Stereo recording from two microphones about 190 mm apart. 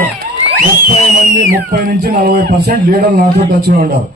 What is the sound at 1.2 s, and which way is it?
A man's voice, 45° right (ahead or behind).